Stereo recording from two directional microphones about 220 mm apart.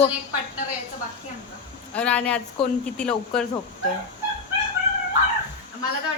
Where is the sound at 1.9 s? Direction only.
5° left (ahead or behind).